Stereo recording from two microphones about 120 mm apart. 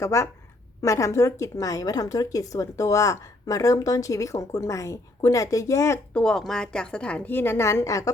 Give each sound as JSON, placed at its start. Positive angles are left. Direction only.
{"t": 0.0, "sound": "speech", "side_deg": 25}
{"t": 6.1, "sound": "a woman's voice", "side_deg": 5}